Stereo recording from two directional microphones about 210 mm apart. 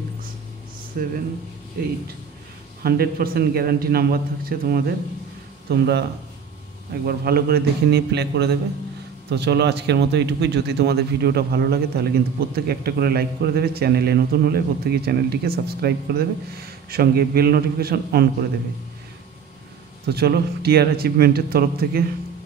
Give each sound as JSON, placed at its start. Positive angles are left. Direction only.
{"t": 1.0, "sound": "speech", "side_deg": -45}
{"t": 2.8, "sound": "speech", "side_deg": -45}
{"t": 7.1, "sound": "speech", "side_deg": -45}
{"t": 20.1, "sound": "speech", "side_deg": -50}